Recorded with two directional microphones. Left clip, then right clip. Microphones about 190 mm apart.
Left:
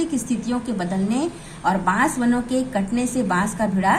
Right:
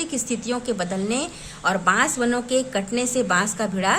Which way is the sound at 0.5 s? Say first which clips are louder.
Right 2 dB; 55° right (ahead or behind).